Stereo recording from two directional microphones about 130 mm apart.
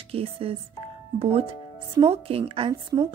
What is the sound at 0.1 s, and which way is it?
A woman's voice, 45° right (ahead or behind).